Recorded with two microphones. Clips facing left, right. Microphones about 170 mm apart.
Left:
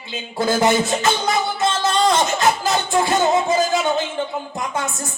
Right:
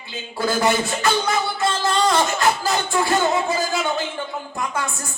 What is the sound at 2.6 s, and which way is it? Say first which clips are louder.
Speech: left 2 dB; 20° left (ahead or behind).